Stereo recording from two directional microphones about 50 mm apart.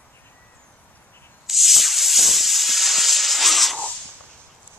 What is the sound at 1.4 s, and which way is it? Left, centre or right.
Hiss, centre.